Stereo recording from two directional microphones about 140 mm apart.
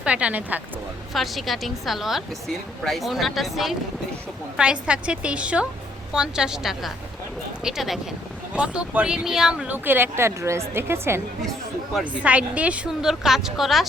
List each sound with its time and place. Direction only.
0.0 s speech: 10° right (ahead or behind)
1.1 s a woman's voice: centre (ahead or behind)